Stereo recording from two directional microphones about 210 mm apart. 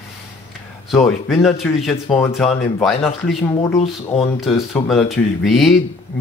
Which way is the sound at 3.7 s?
30° left (ahead or behind).